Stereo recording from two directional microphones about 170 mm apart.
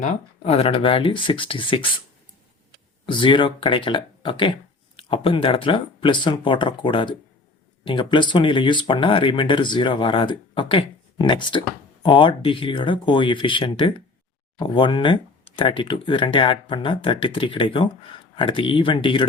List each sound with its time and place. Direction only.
0.0 s speech: 35° left (ahead or behind)
3.1 s speech: 30° left (ahead or behind)